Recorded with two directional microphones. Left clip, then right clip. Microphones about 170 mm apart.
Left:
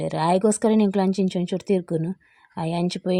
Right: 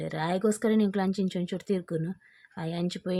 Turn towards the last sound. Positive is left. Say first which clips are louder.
# left 8 dB
turn(degrees=30)  # may be behind; listen again after turning